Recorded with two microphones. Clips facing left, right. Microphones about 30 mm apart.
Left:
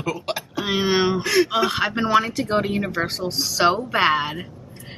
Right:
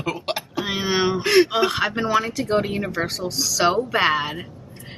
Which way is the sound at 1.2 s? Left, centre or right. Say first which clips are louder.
Right 3 dB; right.